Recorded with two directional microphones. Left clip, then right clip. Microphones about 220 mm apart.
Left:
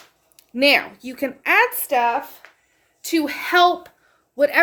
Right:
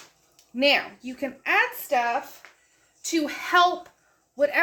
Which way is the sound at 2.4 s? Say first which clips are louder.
Left 3 dB; 15° left (ahead or behind).